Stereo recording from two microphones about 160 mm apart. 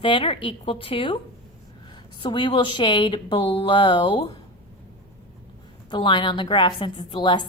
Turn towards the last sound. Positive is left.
turn(degrees=30)  # may be behind; listen again after turning